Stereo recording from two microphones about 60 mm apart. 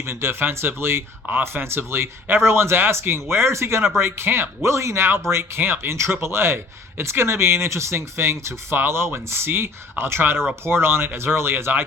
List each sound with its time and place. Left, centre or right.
0.0 s speech: right